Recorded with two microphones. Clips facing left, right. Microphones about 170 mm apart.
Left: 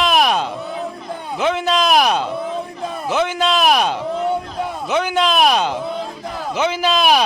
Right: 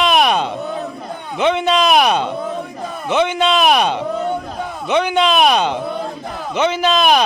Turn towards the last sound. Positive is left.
turn(degrees=5)  # may be behind; listen again after turning